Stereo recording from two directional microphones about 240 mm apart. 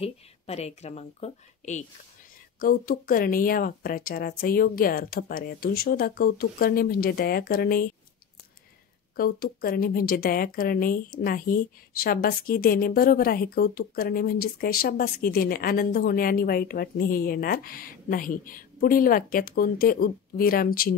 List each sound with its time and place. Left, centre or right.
0.0 s speech: left
9.1 s speech: left